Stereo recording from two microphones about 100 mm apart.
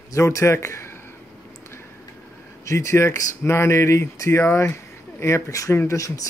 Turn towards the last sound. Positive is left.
turn(degrees=30)  # may be behind; listen again after turning